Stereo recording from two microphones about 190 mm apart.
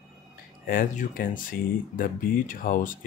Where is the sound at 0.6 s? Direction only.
45° left (ahead or behind).